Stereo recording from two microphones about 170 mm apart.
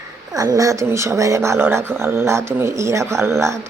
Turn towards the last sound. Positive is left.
turn(degrees=-15)  # may be behind; listen again after turning